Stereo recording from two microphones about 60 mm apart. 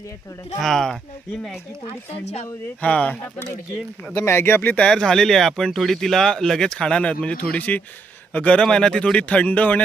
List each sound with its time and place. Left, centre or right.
0.6 s speech: centre
2.8 s speech: left
4.3 s speech: left
4.7 s speech: centre
8.6 s speech: centre